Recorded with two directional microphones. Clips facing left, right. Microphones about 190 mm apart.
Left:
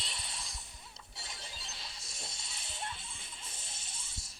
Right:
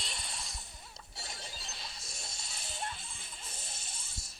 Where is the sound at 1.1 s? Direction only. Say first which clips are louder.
Right 3 dB; 45° right (ahead or behind).